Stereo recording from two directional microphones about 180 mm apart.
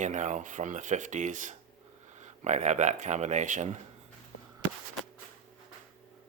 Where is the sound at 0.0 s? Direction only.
40° right (ahead or behind).